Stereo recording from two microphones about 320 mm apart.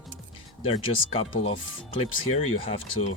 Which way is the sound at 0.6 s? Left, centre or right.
Centre.